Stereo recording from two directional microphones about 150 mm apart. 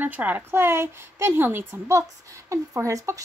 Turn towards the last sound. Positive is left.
turn(degrees=-20)  # may be behind; listen again after turning